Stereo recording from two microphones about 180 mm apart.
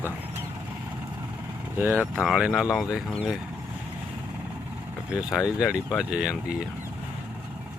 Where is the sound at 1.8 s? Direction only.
10° right (ahead or behind).